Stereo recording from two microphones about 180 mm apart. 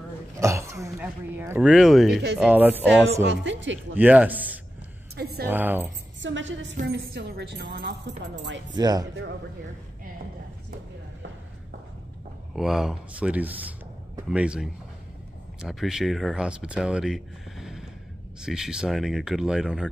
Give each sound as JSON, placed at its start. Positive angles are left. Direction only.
{"t": 0.4, "sound": "speech", "side_deg": -15}
{"t": 1.7, "sound": "speech", "side_deg": 0}
{"t": 3.3, "sound": "a woman's voice", "side_deg": -90}
{"t": 3.9, "sound": "speech", "side_deg": -10}
{"t": 5.1, "sound": "a sound", "side_deg": -60}
{"t": 5.5, "sound": "speech", "side_deg": -10}
{"t": 6.2, "sound": "a woman's voice", "side_deg": -90}
{"t": 6.9, "sound": "a woman's voice", "side_deg": -65}
{"t": 8.7, "sound": "speech", "side_deg": -20}
{"t": 12.5, "sound": "speech", "side_deg": -5}